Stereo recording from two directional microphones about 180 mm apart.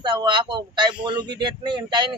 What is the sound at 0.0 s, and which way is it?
A man's voice, 25° right (ahead or behind).